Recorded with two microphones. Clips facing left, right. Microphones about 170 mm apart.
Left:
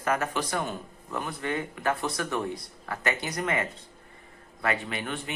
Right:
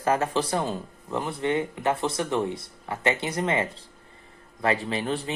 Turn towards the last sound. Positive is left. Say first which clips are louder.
# right 6 dB
turn(degrees=-30)  # may be behind; listen again after turning